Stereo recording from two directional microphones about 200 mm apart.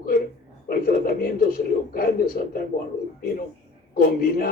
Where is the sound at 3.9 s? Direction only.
50° left (ahead or behind).